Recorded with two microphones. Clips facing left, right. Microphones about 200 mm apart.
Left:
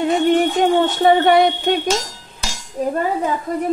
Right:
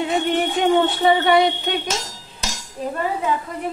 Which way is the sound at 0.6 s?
45° left (ahead or behind).